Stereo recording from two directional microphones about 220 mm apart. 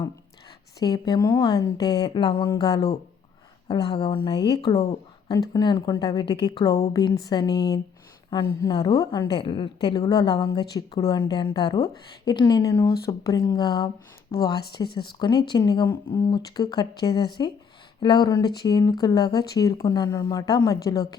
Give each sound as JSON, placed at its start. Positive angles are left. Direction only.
{"t": 0.8, "sound": "a woman's voice", "side_deg": 15}